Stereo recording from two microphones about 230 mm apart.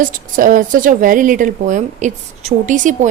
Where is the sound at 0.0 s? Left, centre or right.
Right.